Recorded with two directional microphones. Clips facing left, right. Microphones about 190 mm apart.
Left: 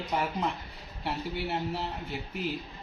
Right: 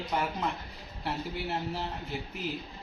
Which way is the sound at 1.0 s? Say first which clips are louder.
Left 1 dB; centre (ahead or behind).